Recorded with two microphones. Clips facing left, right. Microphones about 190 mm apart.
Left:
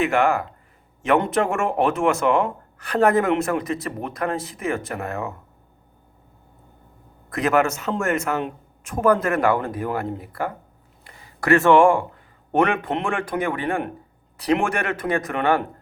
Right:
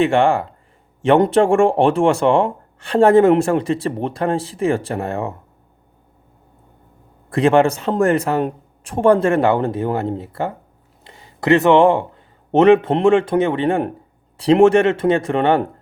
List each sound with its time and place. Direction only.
0.0 s speech: 30° right (ahead or behind)
7.3 s speech: 30° right (ahead or behind)
11.0 s a sound: 25° right (ahead or behind)
12.5 s speech: 25° right (ahead or behind)